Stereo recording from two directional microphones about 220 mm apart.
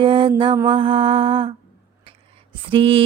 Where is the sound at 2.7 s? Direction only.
25° right (ahead or behind).